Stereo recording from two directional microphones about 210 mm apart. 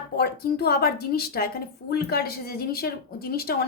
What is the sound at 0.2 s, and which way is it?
A woman's voice, 50° left (ahead or behind).